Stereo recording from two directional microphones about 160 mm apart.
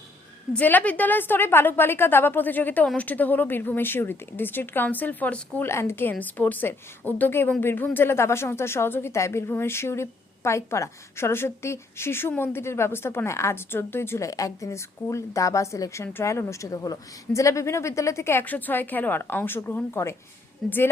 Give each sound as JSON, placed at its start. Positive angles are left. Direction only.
{"t": 0.5, "sound": "a woman's voice", "side_deg": 10}